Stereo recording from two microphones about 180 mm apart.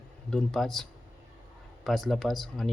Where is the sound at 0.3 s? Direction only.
5° left (ahead or behind).